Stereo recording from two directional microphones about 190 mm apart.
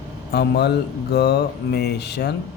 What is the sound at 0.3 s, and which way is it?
Speech, 60° left (ahead or behind).